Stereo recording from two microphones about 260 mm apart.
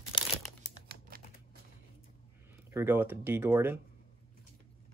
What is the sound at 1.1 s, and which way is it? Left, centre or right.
Typing, right.